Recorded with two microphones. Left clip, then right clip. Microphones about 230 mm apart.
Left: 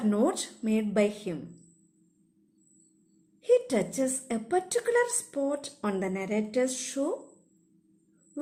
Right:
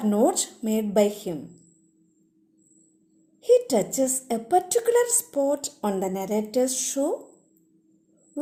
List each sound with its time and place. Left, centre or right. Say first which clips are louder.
0.1 s a woman's voice: right 6 dB; centre
3.4 s a woman's voice: right 5 dB; centre